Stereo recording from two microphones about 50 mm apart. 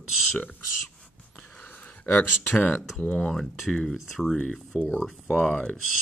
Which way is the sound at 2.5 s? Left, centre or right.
Left.